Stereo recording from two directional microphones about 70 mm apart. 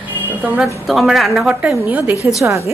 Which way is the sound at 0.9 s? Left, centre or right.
Centre.